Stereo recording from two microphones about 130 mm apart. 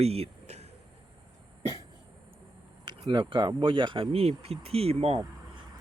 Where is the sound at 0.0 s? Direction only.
50° right (ahead or behind).